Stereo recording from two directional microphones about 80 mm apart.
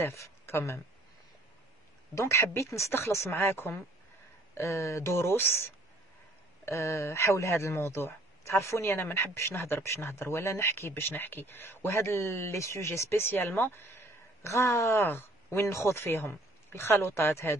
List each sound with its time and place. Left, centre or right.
0.0 s speech: left
2.1 s speech: left
4.6 s speech: left